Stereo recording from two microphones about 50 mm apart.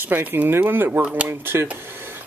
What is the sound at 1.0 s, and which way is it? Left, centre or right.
Speech, right.